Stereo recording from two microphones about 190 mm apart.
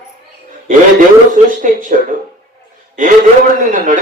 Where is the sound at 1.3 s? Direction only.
40° right (ahead or behind).